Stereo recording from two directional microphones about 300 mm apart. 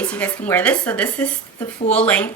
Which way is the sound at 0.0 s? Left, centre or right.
Centre.